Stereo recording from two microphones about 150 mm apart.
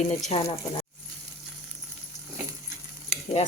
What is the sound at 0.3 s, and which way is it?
Speech, 40° left (ahead or behind).